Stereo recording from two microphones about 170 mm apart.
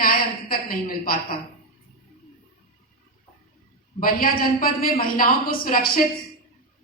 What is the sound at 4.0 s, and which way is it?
A man's voice, 60° left (ahead or behind).